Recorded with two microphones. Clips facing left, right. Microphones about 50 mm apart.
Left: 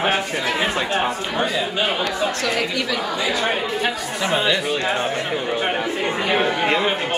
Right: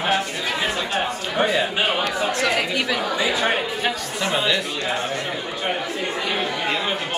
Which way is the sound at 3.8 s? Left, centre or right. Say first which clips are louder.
Left 1 dB; centre.